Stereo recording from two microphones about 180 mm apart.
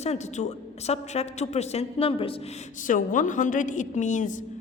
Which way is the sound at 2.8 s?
45° left (ahead or behind).